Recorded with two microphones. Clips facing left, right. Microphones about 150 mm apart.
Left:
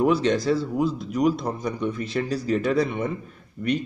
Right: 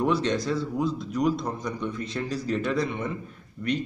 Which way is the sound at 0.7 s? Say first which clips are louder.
Left 3 dB; 10° left (ahead or behind).